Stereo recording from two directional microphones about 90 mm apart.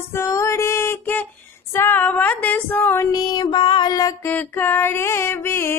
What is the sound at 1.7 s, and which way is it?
Female singing, 25° left (ahead or behind).